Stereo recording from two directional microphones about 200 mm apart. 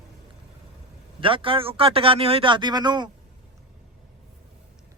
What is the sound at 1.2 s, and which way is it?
A man's voice, 25° right (ahead or behind).